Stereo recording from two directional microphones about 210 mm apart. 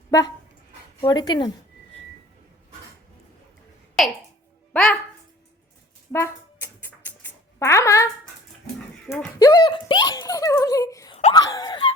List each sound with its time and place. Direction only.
1.0 s speech: 20° left (ahead or behind)
4.0 s speech: centre (ahead or behind)
6.1 s music: 10° left (ahead or behind)
9.0 s a sound: 15° left (ahead or behind)